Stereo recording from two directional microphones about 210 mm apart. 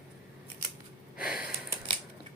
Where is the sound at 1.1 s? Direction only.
5° right (ahead or behind).